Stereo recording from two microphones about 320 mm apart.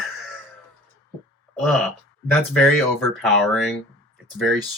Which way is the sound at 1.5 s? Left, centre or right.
Centre.